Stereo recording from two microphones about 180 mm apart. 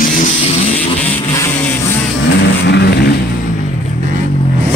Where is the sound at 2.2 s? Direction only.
65° left (ahead or behind).